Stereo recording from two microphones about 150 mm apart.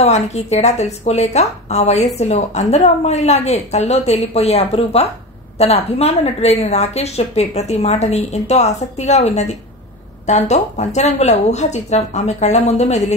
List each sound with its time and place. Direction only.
0.0 s a woman's voice: 45° left (ahead or behind)